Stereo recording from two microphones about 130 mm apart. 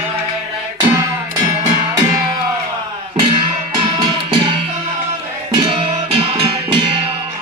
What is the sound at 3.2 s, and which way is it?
Music, 40° right (ahead or behind).